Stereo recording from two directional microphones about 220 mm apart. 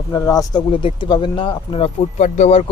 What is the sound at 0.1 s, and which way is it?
Speech, 15° left (ahead or behind).